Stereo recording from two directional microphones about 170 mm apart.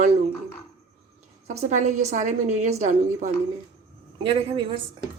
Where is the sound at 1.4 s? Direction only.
45° right (ahead or behind).